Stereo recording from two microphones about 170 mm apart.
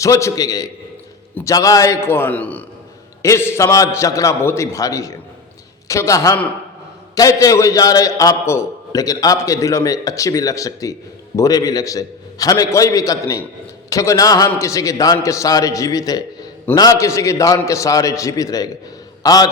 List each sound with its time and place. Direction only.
0.0 s a man's voice: 15° left (ahead or behind)